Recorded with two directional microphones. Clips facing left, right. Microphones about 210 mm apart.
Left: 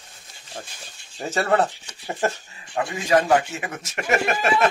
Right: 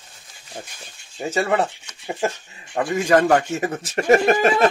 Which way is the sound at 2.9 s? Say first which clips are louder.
Right 3 dB; 50° right (ahead or behind).